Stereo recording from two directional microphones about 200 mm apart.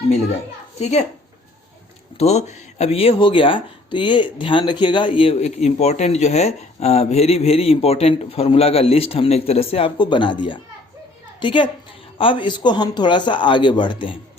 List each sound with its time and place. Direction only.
0.8 s a woman's voice: 35° left (ahead or behind)
2.1 s a woman's voice: 35° left (ahead or behind)